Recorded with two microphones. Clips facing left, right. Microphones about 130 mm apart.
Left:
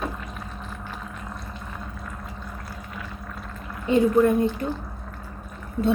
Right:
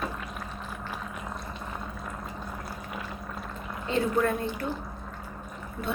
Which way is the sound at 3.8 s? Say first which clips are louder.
Left 8 dB; 15° left (ahead or behind).